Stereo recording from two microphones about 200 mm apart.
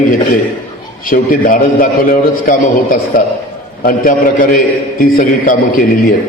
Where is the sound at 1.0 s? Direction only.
45° left (ahead or behind).